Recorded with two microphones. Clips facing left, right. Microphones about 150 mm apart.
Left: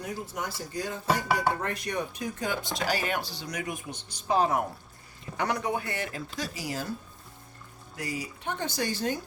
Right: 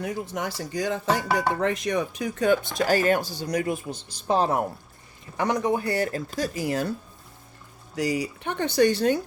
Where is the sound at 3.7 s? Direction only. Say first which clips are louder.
Right 8 dB; 30° right (ahead or behind).